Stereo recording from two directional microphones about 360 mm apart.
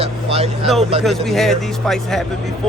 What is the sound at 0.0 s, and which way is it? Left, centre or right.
Vehicle, centre.